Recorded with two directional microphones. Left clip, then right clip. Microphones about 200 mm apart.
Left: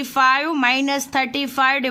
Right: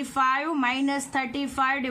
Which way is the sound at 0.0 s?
45° left (ahead or behind).